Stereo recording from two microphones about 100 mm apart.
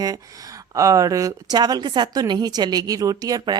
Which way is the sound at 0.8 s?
35° right (ahead or behind).